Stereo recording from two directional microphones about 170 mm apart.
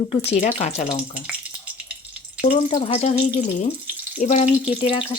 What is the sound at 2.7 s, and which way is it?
Speech, 35° left (ahead or behind).